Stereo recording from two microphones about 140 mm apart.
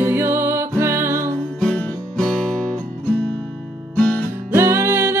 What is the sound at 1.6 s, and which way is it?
Music, 10° left (ahead or behind).